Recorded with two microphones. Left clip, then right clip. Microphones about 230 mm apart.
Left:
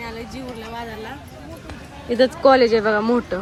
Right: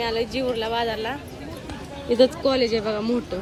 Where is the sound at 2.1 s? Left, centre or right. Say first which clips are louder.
Even; centre.